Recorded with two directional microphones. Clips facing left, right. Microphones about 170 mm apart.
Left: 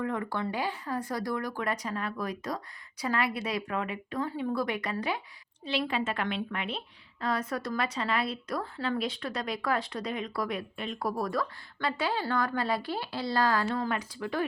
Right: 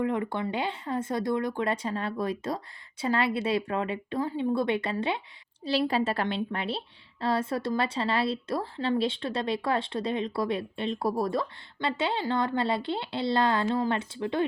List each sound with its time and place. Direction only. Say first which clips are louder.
0.0 s a woman's voice: right 3 dB; 20° right (ahead or behind)
5.6 s a woman's voice: right 5 dB; 35° right (ahead or behind)